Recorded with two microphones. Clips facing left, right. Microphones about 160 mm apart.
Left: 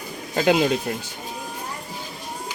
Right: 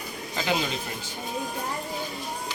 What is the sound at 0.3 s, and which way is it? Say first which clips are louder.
Speech: left 9 dB; 60° left (ahead or behind).